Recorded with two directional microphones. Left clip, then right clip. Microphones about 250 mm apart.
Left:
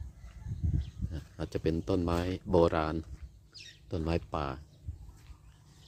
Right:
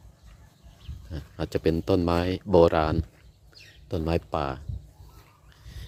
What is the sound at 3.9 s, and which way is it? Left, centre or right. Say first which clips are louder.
Speech: right 7 dB; centre.